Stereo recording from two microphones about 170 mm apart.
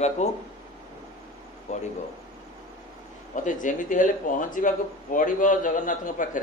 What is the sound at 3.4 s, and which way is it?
A man's voice, 50° left (ahead or behind).